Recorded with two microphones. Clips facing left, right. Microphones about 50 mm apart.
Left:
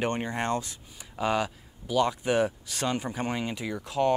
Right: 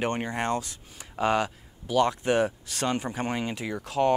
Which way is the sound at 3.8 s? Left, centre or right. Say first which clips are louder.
Right 2 dB; right.